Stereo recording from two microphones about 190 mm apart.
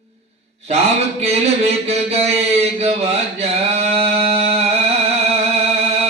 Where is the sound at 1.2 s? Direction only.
35° right (ahead or behind).